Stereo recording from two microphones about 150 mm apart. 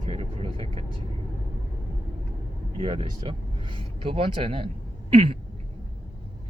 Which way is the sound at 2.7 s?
35° right (ahead or behind).